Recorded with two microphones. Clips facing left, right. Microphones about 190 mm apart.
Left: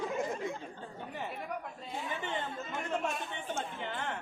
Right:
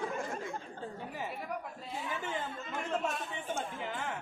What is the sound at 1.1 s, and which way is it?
Speech, 5° right (ahead or behind).